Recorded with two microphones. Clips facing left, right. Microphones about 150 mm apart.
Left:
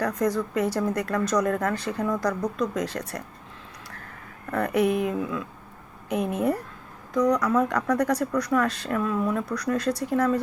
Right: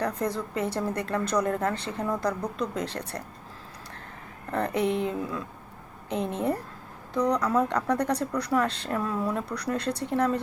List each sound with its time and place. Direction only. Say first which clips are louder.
0.0 s a woman's voice: left 4 dB; 30° right (ahead or behind)
4.5 s a woman's voice: left 3 dB; 25° right (ahead or behind)